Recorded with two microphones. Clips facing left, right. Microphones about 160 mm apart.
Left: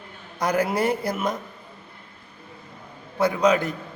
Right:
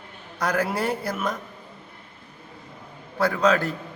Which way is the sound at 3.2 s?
15° left (ahead or behind).